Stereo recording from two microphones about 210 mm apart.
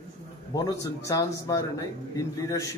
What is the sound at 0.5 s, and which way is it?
A man's voice, 15° left (ahead or behind).